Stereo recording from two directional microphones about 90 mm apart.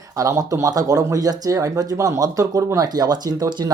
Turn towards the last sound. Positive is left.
turn(degrees=-45)  # may be behind; listen again after turning